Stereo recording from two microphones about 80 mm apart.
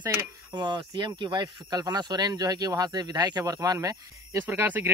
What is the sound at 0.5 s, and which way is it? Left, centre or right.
Speech, right.